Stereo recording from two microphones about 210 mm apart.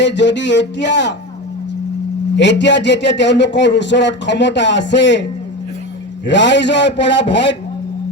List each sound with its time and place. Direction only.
0.0 s a man's voice: 55° left (ahead or behind)
2.3 s a man's voice: 55° left (ahead or behind)
6.2 s a man's voice: 55° left (ahead or behind)